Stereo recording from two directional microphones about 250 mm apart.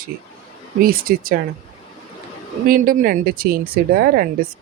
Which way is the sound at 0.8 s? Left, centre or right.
Right.